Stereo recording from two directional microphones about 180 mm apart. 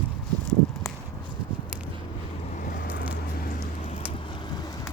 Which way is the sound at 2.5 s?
50° left (ahead or behind).